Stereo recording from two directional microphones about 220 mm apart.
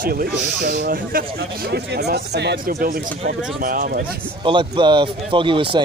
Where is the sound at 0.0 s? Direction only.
40° right (ahead or behind).